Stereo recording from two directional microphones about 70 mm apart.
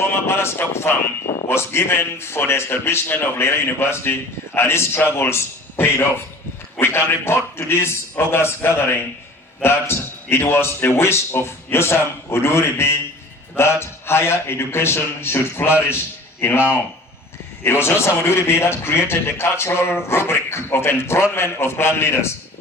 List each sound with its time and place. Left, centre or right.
0.0 s a man's voice: left
17.6 s a man's voice: left